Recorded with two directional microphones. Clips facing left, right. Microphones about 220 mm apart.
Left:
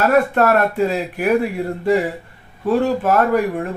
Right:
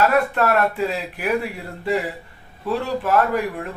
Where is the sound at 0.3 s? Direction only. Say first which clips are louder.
Left 4 dB; 45° left (ahead or behind).